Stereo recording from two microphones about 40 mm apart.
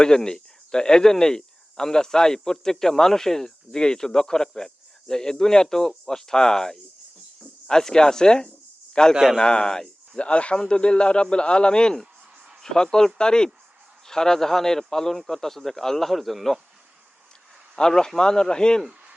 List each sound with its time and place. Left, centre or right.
0.3 s a man's voice: centre
10.2 s a man's voice: left; by 16.6 s centre
17.7 s a man's voice: centre